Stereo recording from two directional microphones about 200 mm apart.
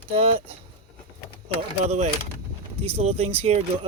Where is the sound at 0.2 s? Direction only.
30° right (ahead or behind).